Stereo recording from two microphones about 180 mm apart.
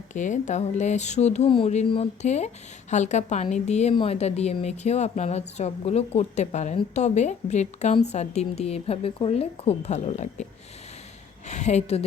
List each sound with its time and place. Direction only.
0.1 s a woman's voice: 45° left (ahead or behind)
11.4 s a woman's voice: 40° left (ahead or behind)